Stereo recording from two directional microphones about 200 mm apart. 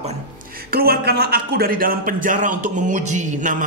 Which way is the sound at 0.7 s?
50° right (ahead or behind).